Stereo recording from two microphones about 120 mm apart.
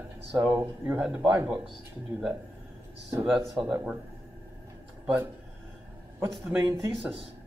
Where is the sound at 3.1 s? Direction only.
20° right (ahead or behind).